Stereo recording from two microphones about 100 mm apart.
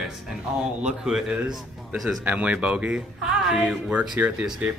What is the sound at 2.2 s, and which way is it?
Speech, 15° right (ahead or behind).